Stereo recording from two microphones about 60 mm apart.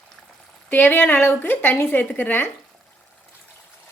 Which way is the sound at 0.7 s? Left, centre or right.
Left.